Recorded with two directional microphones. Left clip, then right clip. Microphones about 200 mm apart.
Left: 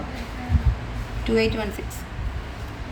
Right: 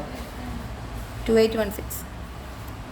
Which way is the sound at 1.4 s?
35° right (ahead or behind).